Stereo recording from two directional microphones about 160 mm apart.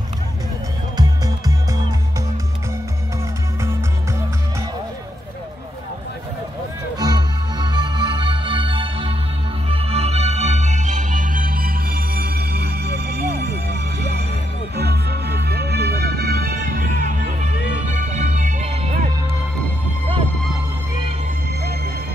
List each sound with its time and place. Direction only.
0.9 s music: 25° right (ahead or behind)
7.0 s music: 25° right (ahead or behind); by 17.0 s 70° right (ahead or behind)
17.9 s music: 50° right (ahead or behind)